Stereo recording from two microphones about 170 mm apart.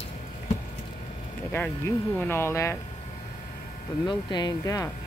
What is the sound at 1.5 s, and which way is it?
Speech, 10° left (ahead or behind).